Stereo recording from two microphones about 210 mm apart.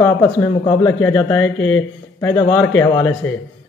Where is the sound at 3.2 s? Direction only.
70° left (ahead or behind).